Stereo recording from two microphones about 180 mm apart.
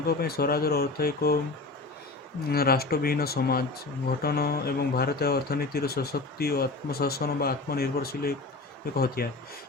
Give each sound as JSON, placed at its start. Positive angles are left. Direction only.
{"t": 0.1, "sound": "speech", "side_deg": 60}
{"t": 2.5, "sound": "speech", "side_deg": 60}